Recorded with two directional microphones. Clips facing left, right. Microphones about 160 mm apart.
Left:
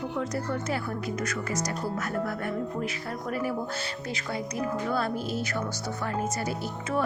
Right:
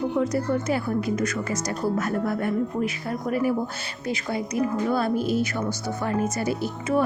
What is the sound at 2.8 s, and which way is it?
Speech, 15° right (ahead or behind).